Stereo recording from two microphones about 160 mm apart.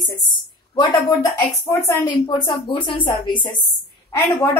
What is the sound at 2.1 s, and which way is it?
A woman's voice, 30° left (ahead or behind).